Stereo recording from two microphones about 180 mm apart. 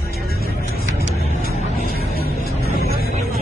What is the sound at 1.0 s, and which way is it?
Music, 40° right (ahead or behind).